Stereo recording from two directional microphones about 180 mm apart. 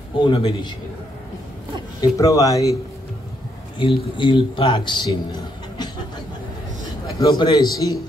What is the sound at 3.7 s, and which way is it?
A man's voice, 25° left (ahead or behind).